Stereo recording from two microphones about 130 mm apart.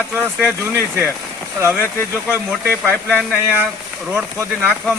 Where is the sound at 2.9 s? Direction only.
5° left (ahead or behind).